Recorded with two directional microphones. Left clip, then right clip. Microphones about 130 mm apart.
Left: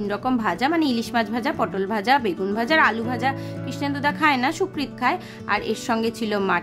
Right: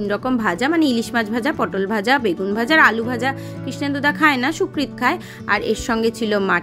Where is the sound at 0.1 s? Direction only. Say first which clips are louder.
Right 3 dB; 25° right (ahead or behind).